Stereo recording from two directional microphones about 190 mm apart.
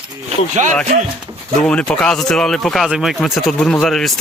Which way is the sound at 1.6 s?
5° left (ahead or behind).